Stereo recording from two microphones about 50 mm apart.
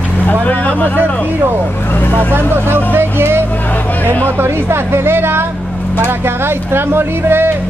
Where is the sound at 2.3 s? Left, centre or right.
Right.